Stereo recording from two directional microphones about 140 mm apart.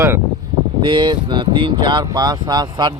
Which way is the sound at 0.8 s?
35° right (ahead or behind).